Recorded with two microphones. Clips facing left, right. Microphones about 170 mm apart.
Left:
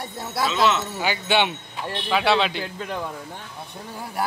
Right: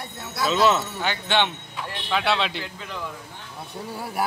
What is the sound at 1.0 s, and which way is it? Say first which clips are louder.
A man's voice: left 2 dB; 10° left (ahead or behind).